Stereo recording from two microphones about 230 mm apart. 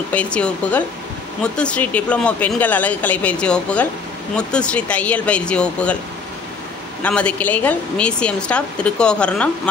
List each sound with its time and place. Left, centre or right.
0.1 s speech: centre
7.0 s speech: centre